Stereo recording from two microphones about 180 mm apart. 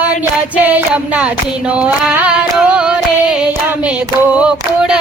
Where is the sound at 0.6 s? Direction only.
10° right (ahead or behind).